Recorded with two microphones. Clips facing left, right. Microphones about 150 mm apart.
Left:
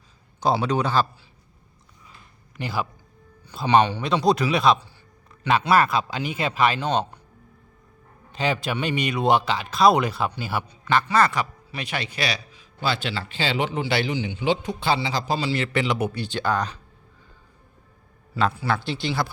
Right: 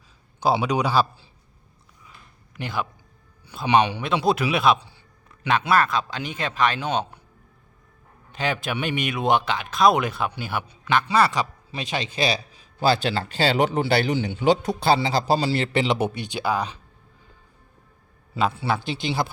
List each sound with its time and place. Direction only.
0.6 s speech: 10° right (ahead or behind)
2.6 s speech: 5° left (ahead or behind)
3.7 s a man's voice: 15° right (ahead or behind); by 6.8 s 5° left (ahead or behind)
8.3 s speech: centre (ahead or behind); by 16.2 s 25° right (ahead or behind)
16.2 s speech: 10° right (ahead or behind)
18.7 s speech: 20° right (ahead or behind)